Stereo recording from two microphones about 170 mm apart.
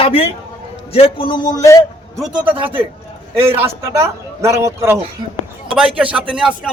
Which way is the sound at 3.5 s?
15° right (ahead or behind).